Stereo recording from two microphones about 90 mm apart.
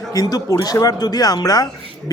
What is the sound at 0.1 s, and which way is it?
A man's voice, 45° left (ahead or behind).